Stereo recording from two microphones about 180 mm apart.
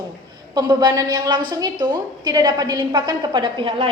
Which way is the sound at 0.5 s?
25° right (ahead or behind).